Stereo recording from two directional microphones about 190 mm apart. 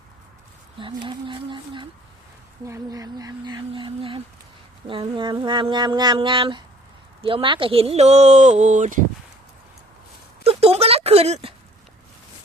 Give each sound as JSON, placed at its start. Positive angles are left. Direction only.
{"t": 0.8, "sound": "cat", "side_deg": -25}
{"t": 7.2, "sound": "speech", "side_deg": -30}
{"t": 10.4, "sound": "a sound", "side_deg": -30}